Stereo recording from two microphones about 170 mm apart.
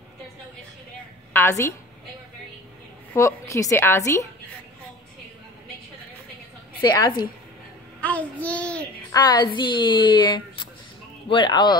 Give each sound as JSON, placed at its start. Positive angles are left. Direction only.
{"t": 1.3, "sound": "a woman's voice", "side_deg": 15}
{"t": 3.1, "sound": "a woman's voice", "side_deg": 15}
{"t": 6.8, "sound": "speech", "side_deg": 25}
{"t": 8.0, "sound": "a woman's voice", "side_deg": 10}
{"t": 9.1, "sound": "speech", "side_deg": 25}